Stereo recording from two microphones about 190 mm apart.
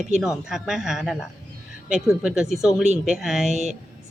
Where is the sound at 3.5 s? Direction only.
40° right (ahead or behind).